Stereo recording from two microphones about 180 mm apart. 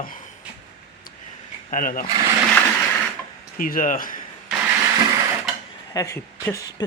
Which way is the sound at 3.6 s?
50° left (ahead or behind).